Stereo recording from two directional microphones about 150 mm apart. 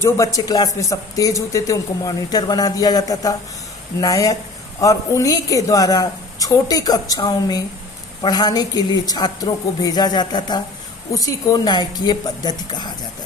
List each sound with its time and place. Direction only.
0.0 s speech: 20° left (ahead or behind)